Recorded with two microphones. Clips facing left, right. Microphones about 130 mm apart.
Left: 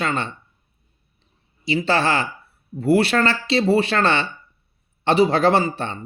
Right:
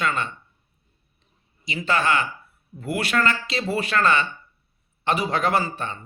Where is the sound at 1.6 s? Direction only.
30° left (ahead or behind).